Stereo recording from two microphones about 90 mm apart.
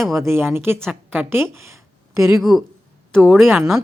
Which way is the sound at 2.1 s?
35° right (ahead or behind).